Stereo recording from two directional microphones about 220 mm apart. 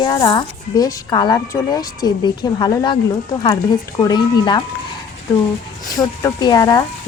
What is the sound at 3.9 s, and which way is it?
Speech, 20° left (ahead or behind).